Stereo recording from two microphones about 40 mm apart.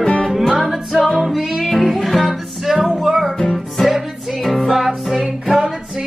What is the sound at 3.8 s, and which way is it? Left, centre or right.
Music, centre.